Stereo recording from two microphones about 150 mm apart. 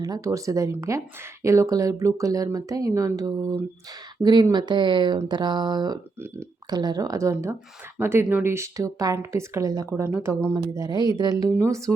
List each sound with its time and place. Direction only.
0.0 s a woman's voice: 25° right (ahead or behind)
9.9 s a woman's voice: 10° right (ahead or behind)